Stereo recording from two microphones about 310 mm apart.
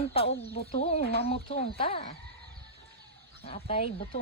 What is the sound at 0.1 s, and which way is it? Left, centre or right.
Speech, centre.